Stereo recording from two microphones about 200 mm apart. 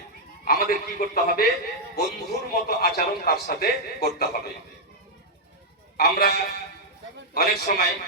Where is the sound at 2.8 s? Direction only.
50° left (ahead or behind).